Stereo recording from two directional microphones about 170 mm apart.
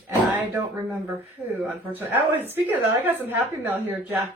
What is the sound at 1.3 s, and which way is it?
A woman's voice, 10° right (ahead or behind).